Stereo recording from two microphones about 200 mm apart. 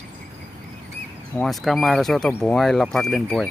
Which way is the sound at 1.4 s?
Centre (ahead or behind).